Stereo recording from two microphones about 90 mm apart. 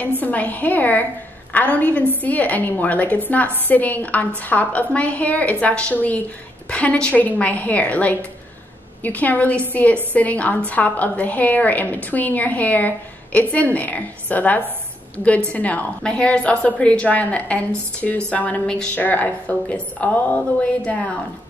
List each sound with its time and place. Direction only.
0.2 s a woman's voice: 15° left (ahead or behind)